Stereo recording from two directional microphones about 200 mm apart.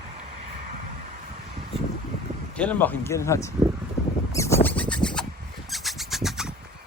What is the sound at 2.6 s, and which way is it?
Speech, 10° left (ahead or behind).